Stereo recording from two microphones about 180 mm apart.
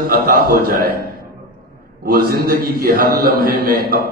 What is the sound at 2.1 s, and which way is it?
A man's voice, 55° right (ahead or behind).